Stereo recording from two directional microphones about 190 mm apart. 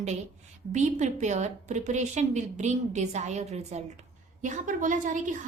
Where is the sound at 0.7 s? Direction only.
40° right (ahead or behind).